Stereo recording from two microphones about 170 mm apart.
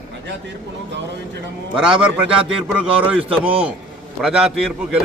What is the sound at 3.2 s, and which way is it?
Speech, 35° right (ahead or behind).